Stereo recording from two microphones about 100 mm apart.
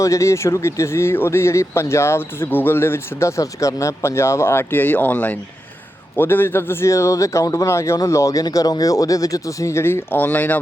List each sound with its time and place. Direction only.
0.0 s a man's voice: 30° left (ahead or behind)